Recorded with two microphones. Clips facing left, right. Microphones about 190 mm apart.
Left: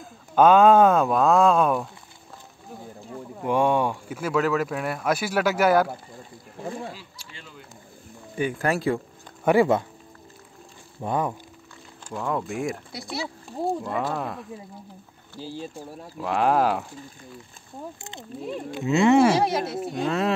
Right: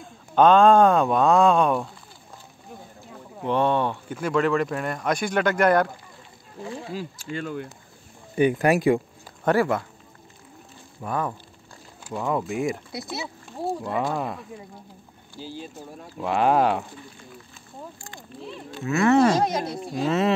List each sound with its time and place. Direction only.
0.0 s speech: 5° left (ahead or behind)
3.4 s speech: 10° left (ahead or behind)
6.9 s speech: 45° right (ahead or behind)
8.4 s speech: 20° right (ahead or behind)
9.4 s speech: 10° left (ahead or behind)
11.0 s speech: 25° left (ahead or behind)
12.0 s speech: 5° right (ahead or behind)
13.8 s speech: centre (ahead or behind)
16.2 s speech: centre (ahead or behind)
18.7 s speech: 15° left (ahead or behind); by 20.3 s centre (ahead or behind)